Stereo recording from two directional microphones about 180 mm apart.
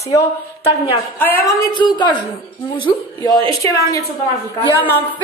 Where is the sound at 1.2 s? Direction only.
15° left (ahead or behind).